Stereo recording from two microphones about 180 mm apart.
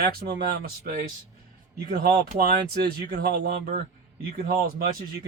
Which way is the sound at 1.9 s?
55° right (ahead or behind).